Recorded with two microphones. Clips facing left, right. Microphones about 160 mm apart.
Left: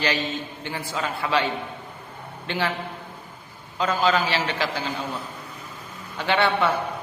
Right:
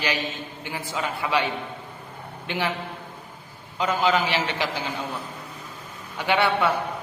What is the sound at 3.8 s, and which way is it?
A man's voice, 15° right (ahead or behind).